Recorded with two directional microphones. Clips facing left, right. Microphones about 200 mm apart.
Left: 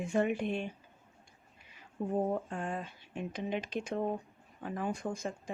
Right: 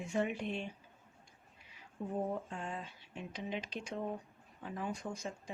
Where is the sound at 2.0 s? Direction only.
50° left (ahead or behind).